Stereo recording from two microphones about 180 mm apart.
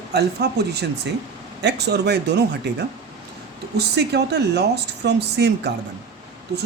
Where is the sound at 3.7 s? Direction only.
65° right (ahead or behind).